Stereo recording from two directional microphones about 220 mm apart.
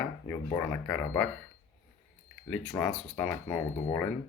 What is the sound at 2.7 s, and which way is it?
Speech, 15° left (ahead or behind).